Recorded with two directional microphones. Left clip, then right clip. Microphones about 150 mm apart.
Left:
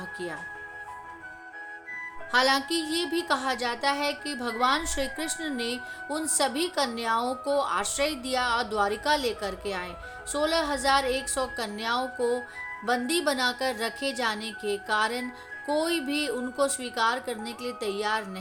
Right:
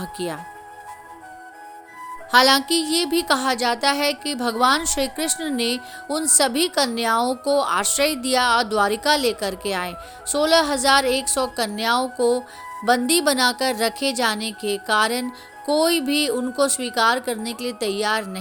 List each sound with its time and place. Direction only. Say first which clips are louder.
0.0 s speech: right 6 dB; 55° right (ahead or behind)
2.3 s a woman's voice: right 8 dB; 50° right (ahead or behind)